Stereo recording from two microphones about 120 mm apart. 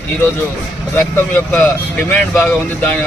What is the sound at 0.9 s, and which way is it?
Speech, 20° left (ahead or behind).